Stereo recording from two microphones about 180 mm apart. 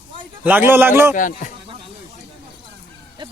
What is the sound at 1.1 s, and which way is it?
Speech, 45° left (ahead or behind).